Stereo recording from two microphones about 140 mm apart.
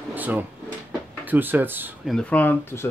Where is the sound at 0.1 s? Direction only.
15° right (ahead or behind).